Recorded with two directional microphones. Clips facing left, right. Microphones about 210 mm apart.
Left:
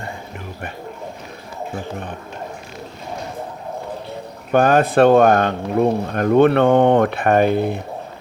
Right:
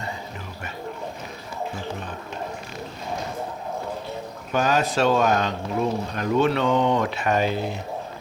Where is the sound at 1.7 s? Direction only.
55° left (ahead or behind).